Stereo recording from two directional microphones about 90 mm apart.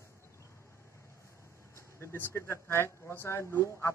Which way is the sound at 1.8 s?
30° left (ahead or behind).